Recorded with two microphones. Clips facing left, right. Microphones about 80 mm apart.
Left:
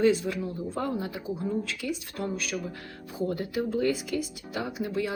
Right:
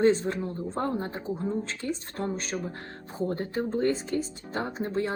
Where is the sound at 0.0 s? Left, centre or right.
Right.